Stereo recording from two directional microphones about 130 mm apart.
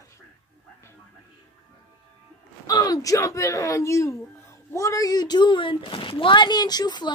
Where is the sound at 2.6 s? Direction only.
30° left (ahead or behind).